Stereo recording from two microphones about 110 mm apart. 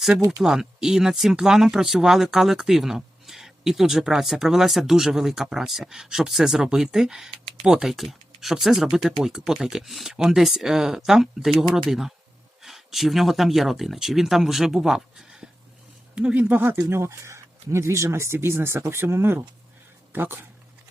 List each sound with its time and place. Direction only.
0.4 s speech: 5° right (ahead or behind)